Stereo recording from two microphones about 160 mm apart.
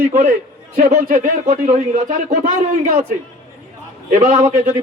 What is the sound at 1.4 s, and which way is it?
Speech, 50° right (ahead or behind).